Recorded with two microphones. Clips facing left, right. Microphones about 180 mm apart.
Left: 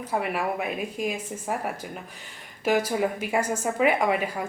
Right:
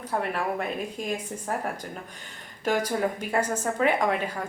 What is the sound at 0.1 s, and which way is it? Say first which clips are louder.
A woman's voice: left 1 dB; 10° left (ahead or behind).